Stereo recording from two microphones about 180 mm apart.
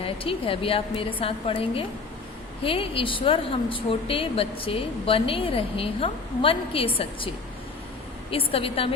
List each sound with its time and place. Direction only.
0.0 s speech: 30° left (ahead or behind)
8.3 s speech: 30° left (ahead or behind)